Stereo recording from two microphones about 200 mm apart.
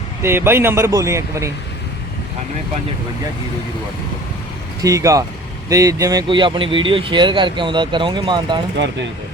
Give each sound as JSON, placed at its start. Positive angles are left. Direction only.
{"t": 0.2, "sound": "speech", "side_deg": -10}
{"t": 4.8, "sound": "speech", "side_deg": -15}